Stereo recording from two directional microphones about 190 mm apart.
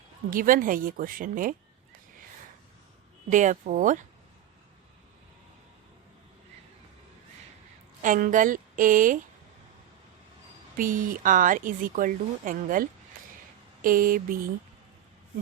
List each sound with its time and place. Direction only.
0.3 s speech: 45° right (ahead or behind)
3.2 s speech: 40° right (ahead or behind)
8.0 s speech: 45° right (ahead or behind)
10.8 s speech: 45° right (ahead or behind)